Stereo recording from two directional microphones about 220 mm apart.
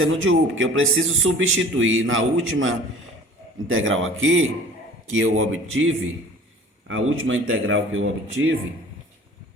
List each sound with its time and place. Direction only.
0.0 s a man's voice: 65° right (ahead or behind)